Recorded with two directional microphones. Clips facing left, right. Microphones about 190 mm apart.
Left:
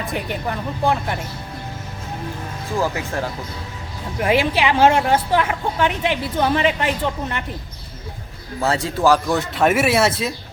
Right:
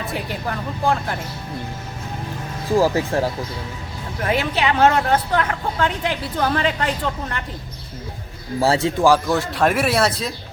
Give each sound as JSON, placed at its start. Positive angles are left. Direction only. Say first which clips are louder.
{"t": 0.1, "sound": "speech", "louder": "left 1 dB", "side_deg": 5}
{"t": 2.6, "sound": "speech", "louder": "right 6 dB", "side_deg": -35}
{"t": 4.2, "sound": "a woman's voice", "louder": "left 3 dB", "side_deg": 10}
{"t": 8.6, "sound": "a man's voice", "louder": "right 3 dB", "side_deg": -30}
{"t": 9.0, "sound": "a man's voice", "louder": "left 1 dB", "side_deg": -10}
{"t": 9.6, "sound": "speech", "louder": "left 3 dB", "side_deg": 5}